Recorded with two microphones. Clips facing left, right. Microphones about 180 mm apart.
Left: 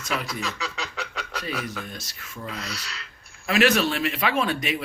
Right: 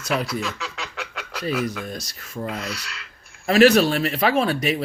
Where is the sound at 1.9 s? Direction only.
40° right (ahead or behind).